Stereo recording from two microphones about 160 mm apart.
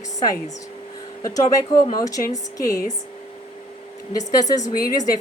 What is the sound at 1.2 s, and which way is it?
A woman's voice, 20° left (ahead or behind).